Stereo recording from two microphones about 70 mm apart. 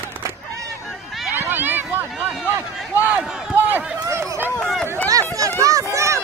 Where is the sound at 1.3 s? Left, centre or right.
Right.